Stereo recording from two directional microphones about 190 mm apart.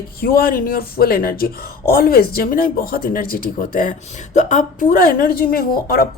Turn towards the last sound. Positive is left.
turn(degrees=50)  # may be behind; listen again after turning